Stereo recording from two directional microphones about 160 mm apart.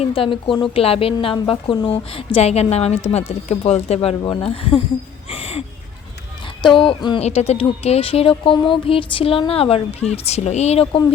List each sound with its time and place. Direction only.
0.0 s speech: 35° left (ahead or behind)
6.7 s speech: 30° left (ahead or behind)
7.2 s speech: 40° left (ahead or behind)